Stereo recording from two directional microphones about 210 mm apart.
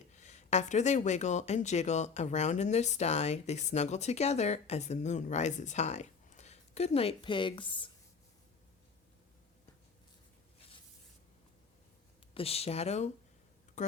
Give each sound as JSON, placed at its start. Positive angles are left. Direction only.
{"t": 0.1, "sound": "speech", "side_deg": 35}
{"t": 12.3, "sound": "speech", "side_deg": 25}